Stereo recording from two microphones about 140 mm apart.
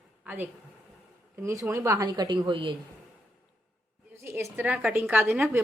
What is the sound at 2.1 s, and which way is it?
Speech, 30° right (ahead or behind).